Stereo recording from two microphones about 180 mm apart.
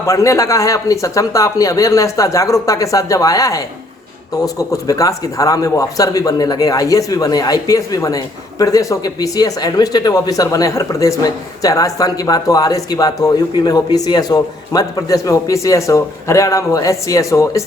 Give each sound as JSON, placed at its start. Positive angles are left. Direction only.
{"t": 0.0, "sound": "a man's voice", "side_deg": 15}